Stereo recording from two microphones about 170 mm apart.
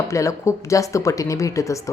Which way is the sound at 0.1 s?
15° left (ahead or behind).